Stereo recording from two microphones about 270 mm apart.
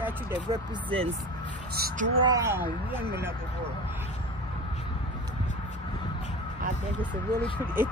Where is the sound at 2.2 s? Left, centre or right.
Centre.